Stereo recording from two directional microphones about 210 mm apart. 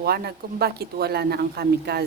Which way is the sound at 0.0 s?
50° right (ahead or behind).